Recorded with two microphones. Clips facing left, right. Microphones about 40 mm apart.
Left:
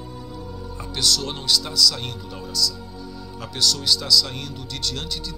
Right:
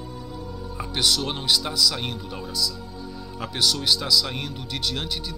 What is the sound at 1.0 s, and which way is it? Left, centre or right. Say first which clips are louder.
Speech: even; centre.